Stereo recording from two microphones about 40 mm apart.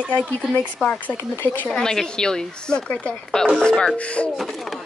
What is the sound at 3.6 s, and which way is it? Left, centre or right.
Speech, left.